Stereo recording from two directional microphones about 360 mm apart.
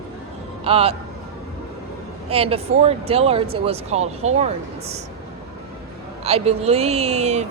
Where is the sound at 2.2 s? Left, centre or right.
Centre.